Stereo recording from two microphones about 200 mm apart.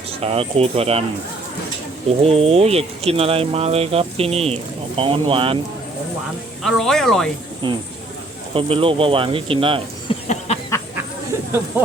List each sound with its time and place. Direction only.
0.2 s speech: 30° right (ahead or behind)
2.0 s speech: 30° right (ahead or behind)
6.6 s speech: centre (ahead or behind)
7.6 s speech: 25° right (ahead or behind)
10.1 s a sound: 25° left (ahead or behind)